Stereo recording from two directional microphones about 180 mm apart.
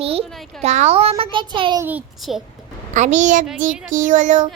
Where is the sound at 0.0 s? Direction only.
35° right (ahead or behind).